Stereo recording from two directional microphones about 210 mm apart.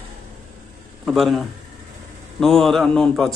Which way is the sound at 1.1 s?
Centre (ahead or behind).